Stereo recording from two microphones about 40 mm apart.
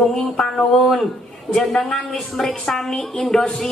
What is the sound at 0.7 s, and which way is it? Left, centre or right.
Speech, centre.